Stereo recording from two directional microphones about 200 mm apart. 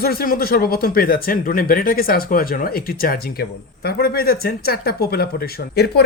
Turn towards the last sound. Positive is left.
turn(degrees=55)  # may be behind; listen again after turning